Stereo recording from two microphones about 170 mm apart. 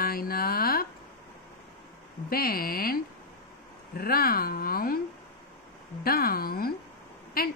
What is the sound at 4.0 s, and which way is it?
A woman's voice, 60° left (ahead or behind).